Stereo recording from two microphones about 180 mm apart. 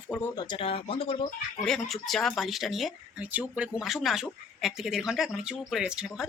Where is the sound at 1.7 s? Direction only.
Centre (ahead or behind).